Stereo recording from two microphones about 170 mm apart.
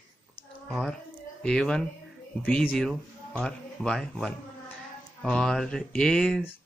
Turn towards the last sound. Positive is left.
turn(degrees=5)  # may be behind; listen again after turning